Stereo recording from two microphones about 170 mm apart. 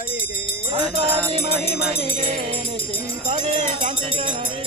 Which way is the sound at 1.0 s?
35° right (ahead or behind).